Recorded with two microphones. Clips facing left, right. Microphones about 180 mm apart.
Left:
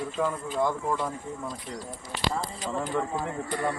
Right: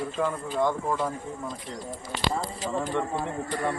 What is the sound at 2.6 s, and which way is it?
Speech, centre (ahead or behind).